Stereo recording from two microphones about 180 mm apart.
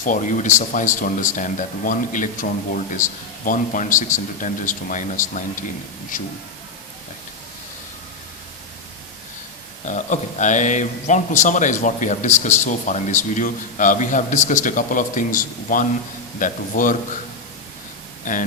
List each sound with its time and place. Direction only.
0.0 s a man's voice: 45° left (ahead or behind)
9.8 s a man's voice: 45° left (ahead or behind)
18.3 s a man's voice: 45° left (ahead or behind)